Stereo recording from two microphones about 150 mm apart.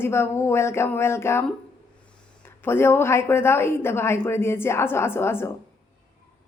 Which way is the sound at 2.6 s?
15° left (ahead or behind).